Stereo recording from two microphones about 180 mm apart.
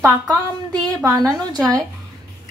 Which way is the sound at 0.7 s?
15° right (ahead or behind).